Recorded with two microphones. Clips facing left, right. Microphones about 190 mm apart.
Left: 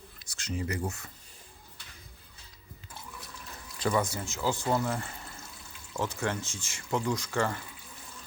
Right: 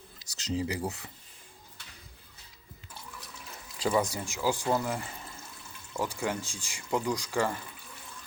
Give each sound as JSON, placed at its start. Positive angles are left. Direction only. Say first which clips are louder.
{"t": 0.5, "sound": "speech", "louder": "right 2 dB", "side_deg": -15}
{"t": 3.8, "sound": "speech", "louder": "right 1 dB", "side_deg": -15}